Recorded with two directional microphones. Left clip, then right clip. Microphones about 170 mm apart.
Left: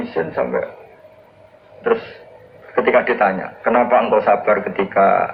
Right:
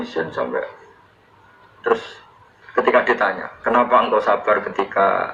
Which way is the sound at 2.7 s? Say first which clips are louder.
Left 1 dB; 30° right (ahead or behind).